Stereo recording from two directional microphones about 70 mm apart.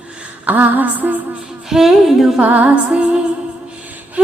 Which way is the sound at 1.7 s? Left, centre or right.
Centre.